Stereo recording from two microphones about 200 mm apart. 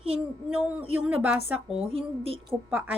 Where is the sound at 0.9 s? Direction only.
5° right (ahead or behind).